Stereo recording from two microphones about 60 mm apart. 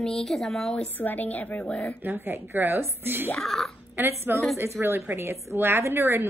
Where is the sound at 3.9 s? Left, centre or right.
Right.